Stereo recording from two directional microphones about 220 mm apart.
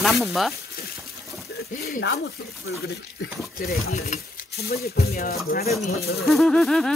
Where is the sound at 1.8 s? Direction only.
45° left (ahead or behind).